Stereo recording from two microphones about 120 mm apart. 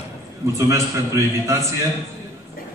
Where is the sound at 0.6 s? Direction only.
25° right (ahead or behind).